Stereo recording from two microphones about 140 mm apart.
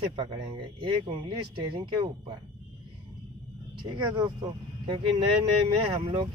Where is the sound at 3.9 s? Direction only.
30° right (ahead or behind).